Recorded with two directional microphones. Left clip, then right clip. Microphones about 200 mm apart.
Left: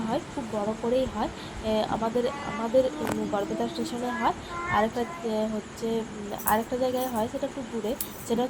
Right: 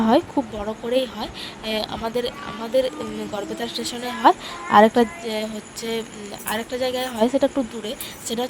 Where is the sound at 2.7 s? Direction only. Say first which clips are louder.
Right 3 dB; 55° right (ahead or behind).